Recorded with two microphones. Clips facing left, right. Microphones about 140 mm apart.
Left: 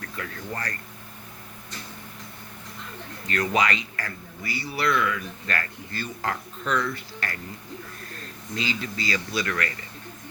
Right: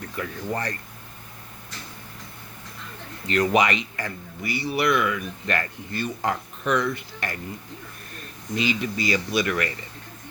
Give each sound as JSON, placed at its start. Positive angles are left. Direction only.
{"t": 0.0, "sound": "speech", "side_deg": -20}
{"t": 3.2, "sound": "speech", "side_deg": -20}